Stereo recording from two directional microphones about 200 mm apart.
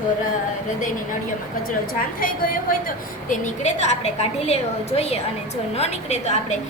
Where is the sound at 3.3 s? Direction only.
35° left (ahead or behind).